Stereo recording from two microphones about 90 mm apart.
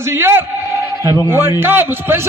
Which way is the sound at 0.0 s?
30° right (ahead or behind).